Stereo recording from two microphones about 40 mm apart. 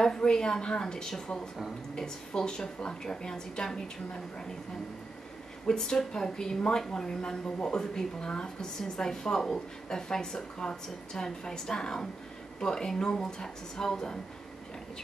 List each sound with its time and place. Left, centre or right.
0.0 s a woman's voice: centre
5.7 s a woman's voice: centre